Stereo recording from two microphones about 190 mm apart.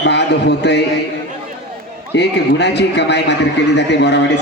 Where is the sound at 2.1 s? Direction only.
65° left (ahead or behind).